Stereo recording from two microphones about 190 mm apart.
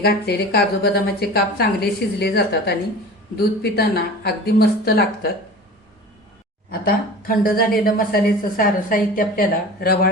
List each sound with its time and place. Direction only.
0.0 s a woman's voice: 55° left (ahead or behind)
6.7 s a woman's voice: 50° left (ahead or behind)